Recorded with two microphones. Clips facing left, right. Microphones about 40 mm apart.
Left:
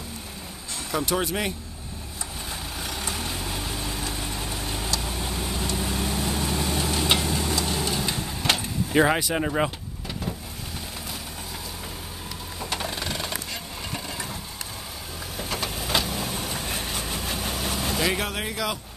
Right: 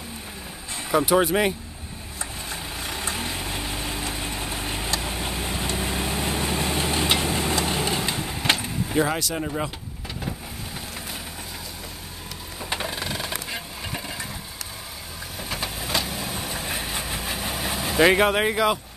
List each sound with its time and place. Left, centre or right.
0.9 s speech: centre
2.5 s vehicle: centre; by 8.1 s right
8.1 s vehicle: centre
8.9 s speech: left
12.6 s a sound: centre
12.9 s vehicle: centre
15.3 s vehicle: centre
17.9 s speech: right